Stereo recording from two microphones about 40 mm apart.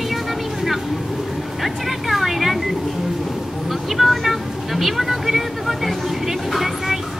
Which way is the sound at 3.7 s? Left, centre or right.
Centre.